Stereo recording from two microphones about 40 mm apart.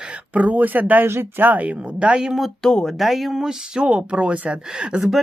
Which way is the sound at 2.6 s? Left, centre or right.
Centre.